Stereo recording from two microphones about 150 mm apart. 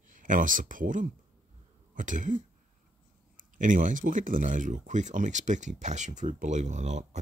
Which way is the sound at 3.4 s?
60° right (ahead or behind).